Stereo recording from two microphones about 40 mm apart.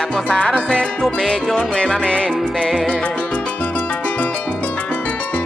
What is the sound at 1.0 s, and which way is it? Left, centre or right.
Music, centre.